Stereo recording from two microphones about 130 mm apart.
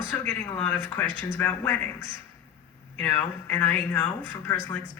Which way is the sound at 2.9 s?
15° left (ahead or behind).